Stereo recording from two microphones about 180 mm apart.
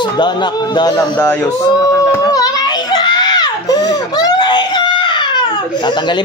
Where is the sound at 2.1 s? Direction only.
20° left (ahead or behind).